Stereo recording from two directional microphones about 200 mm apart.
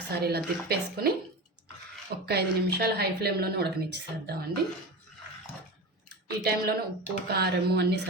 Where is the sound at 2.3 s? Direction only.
55° right (ahead or behind).